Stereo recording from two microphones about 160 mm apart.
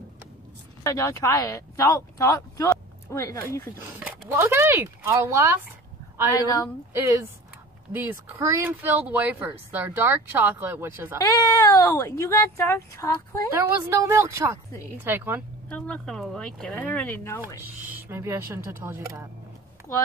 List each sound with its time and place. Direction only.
0.8 s speech: 20° left (ahead or behind)
4.3 s speech: 15° right (ahead or behind)
6.9 s speech: 15° right (ahead or behind)
11.2 s speech: 20° left (ahead or behind)
13.5 s speech: 15° right (ahead or behind)
15.7 s speech: 5° left (ahead or behind)
17.8 s speech: 15° right (ahead or behind)